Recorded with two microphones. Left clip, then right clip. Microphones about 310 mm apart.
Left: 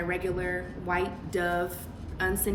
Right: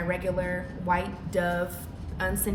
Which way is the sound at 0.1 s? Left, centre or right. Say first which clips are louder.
Right 5 dB; centre.